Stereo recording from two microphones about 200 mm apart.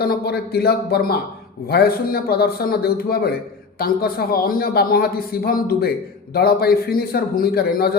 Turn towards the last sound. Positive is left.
turn(degrees=50)  # may be behind; listen again after turning